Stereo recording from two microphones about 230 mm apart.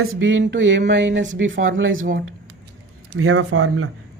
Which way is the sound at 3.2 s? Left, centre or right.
Right.